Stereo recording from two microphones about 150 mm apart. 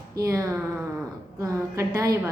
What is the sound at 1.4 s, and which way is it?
Speech, 20° right (ahead or behind).